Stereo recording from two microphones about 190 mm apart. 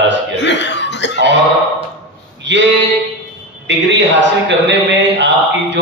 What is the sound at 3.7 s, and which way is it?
Speech, 70° right (ahead or behind).